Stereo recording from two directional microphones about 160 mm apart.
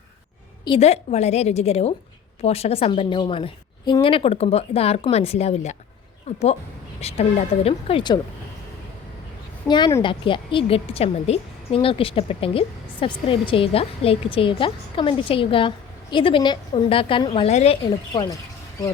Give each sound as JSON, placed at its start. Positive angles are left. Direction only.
{"t": 0.8, "sound": "a woman's voice", "side_deg": 40}
{"t": 9.6, "sound": "a woman's voice", "side_deg": 25}
{"t": 17.8, "sound": "speech", "side_deg": 25}